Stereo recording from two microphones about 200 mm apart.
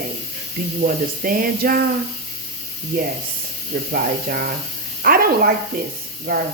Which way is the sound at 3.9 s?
45° right (ahead or behind).